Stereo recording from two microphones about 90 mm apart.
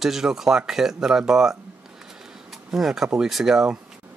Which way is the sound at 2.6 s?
5° right (ahead or behind).